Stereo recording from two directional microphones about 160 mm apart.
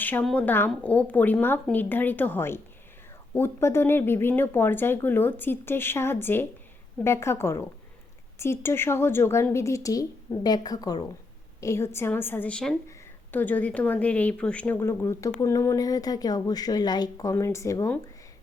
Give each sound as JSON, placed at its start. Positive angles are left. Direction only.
{"t": 0.0, "sound": "speech", "side_deg": 10}